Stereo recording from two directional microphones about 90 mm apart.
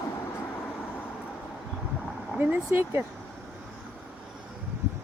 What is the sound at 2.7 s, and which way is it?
Speech, 30° right (ahead or behind).